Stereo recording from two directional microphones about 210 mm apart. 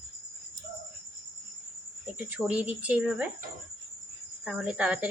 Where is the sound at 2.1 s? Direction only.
5° right (ahead or behind).